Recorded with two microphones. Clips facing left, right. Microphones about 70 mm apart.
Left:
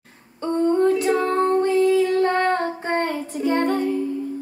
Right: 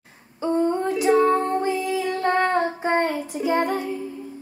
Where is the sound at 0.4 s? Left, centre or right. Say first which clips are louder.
Left 3 dB; centre.